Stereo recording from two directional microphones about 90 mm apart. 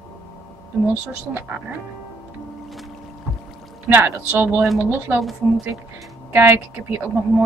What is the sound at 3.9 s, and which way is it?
Speech, 25° right (ahead or behind).